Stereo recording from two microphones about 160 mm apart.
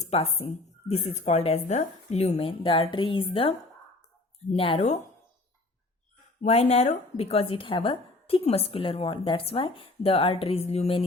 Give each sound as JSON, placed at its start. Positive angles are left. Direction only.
{"t": 0.0, "sound": "a woman's voice", "side_deg": 40}
{"t": 4.5, "sound": "a woman's voice", "side_deg": 35}
{"t": 6.4, "sound": "a woman's voice", "side_deg": 45}